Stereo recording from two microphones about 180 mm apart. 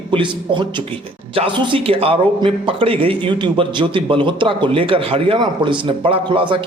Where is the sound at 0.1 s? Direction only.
25° right (ahead or behind).